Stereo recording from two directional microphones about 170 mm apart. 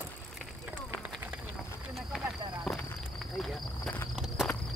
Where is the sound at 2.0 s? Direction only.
Centre (ahead or behind).